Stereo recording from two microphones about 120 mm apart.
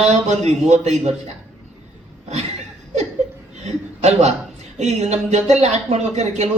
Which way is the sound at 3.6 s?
65° right (ahead or behind).